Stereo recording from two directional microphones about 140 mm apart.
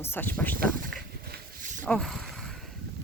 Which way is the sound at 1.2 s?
80° right.